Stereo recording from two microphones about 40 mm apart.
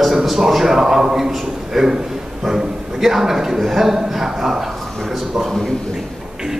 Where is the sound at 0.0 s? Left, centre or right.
Centre.